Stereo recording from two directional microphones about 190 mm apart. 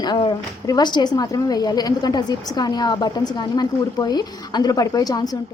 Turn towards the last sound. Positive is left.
turn(degrees=20)  # may be behind; listen again after turning